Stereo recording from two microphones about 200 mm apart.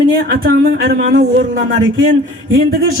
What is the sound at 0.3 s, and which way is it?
Speech, 50° right (ahead or behind).